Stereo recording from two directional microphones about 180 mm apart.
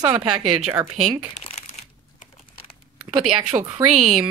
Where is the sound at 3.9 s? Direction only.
40° right (ahead or behind).